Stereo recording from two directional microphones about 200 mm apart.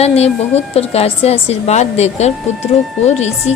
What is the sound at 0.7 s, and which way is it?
A woman's voice, 30° left (ahead or behind).